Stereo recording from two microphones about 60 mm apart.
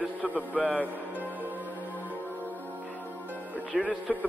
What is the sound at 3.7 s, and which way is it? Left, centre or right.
Speech, centre.